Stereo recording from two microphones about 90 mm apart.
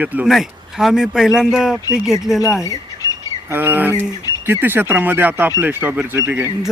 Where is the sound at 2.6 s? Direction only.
40° left (ahead or behind).